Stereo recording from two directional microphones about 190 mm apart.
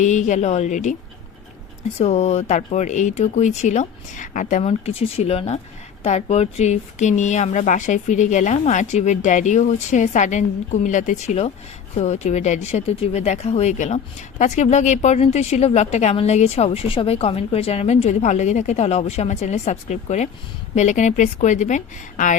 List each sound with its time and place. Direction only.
0.0 s speech: 40° left (ahead or behind)
2.0 s speech: 35° left (ahead or behind)